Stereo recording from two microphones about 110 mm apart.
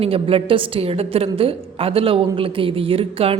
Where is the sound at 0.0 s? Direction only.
60° right (ahead or behind).